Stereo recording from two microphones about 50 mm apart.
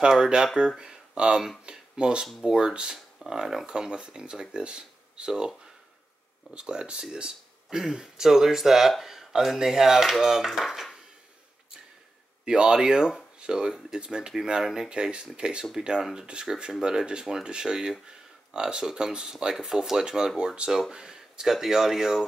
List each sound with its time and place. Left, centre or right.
0.6 s speech: centre
6.5 s speech: centre
12.4 s speech: centre
16.8 s speech: centre